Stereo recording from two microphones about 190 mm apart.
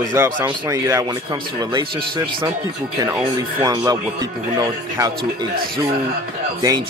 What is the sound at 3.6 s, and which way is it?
Speech, 20° right (ahead or behind).